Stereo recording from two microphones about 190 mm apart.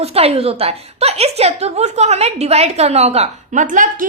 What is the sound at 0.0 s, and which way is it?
A woman's voice, 30° right (ahead or behind).